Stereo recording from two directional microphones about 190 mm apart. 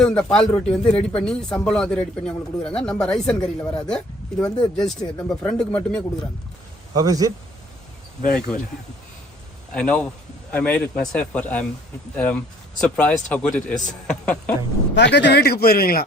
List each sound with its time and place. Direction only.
0.0 s speech: 5° left (ahead or behind)
6.9 s a man's voice: 20° right (ahead or behind)
8.3 s speech: 5° left (ahead or behind)
9.7 s speech: 5° left (ahead or behind)
14.9 s speech: 65° left (ahead or behind); by 16.0 s 50° left (ahead or behind)